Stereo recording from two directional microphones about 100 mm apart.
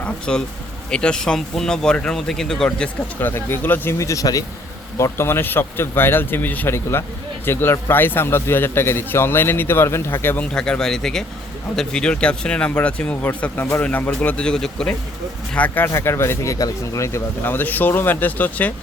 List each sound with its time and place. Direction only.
0.0 s speech: 10° left (ahead or behind)
3.2 s a man's voice: 20° left (ahead or behind)
3.9 s a man's voice: 30° left (ahead or behind)
10.5 s speech: 10° left (ahead or behind)
15.5 s a man's voice: 15° left (ahead or behind)